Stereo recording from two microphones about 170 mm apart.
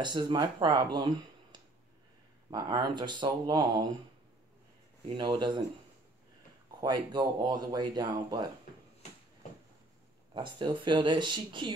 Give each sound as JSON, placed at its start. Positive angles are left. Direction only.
{"t": 0.0, "sound": "speech", "side_deg": -25}
{"t": 5.1, "sound": "speech", "side_deg": -30}
{"t": 6.8, "sound": "speech", "side_deg": -25}
{"t": 10.3, "sound": "speech", "side_deg": -25}